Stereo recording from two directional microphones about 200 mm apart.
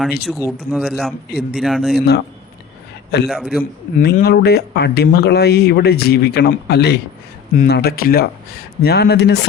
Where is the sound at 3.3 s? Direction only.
Centre (ahead or behind).